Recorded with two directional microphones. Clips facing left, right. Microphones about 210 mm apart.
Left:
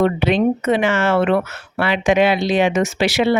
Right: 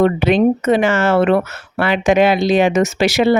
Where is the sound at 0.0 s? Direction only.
45° right (ahead or behind).